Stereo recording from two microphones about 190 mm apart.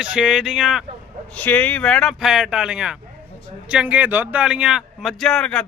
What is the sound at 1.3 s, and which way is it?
A man's voice, 5° left (ahead or behind).